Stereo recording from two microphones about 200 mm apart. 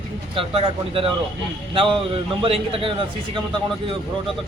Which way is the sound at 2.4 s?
25° right (ahead or behind).